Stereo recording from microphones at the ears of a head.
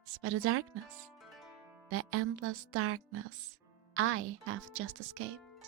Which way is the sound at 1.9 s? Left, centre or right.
Right.